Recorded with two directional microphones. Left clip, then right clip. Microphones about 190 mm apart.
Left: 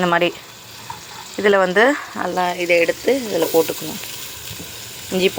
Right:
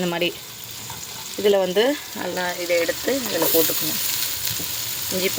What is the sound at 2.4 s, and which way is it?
Speech, 20° left (ahead or behind).